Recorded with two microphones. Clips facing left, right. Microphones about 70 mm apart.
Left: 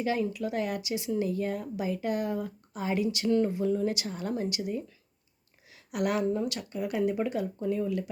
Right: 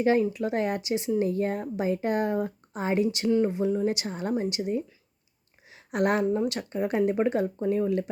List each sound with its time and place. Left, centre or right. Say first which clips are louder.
0.0 s speech: right 6 dB; right
5.6 s a sound: right 5 dB; right
6.2 s speech: right 3 dB; right